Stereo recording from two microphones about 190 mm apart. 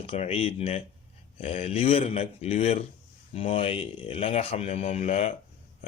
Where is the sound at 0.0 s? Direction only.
30° left (ahead or behind).